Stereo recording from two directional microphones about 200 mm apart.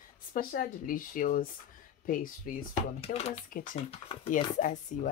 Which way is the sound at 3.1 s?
30° left (ahead or behind).